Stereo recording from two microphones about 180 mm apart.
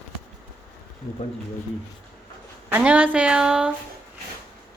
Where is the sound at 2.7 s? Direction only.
10° right (ahead or behind).